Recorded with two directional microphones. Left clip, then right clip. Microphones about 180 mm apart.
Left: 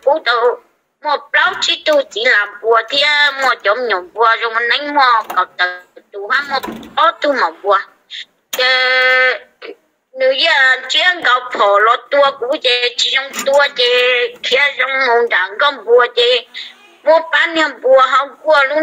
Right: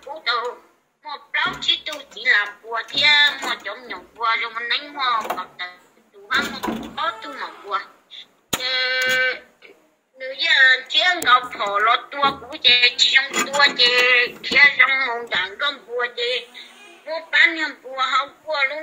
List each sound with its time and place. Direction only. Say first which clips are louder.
0.1 s speech: left 11 dB; 50° left (ahead or behind)
15.1 s speech: left 11 dB; 45° left (ahead or behind)